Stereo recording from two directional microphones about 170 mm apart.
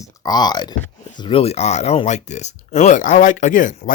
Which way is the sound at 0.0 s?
20° left (ahead or behind).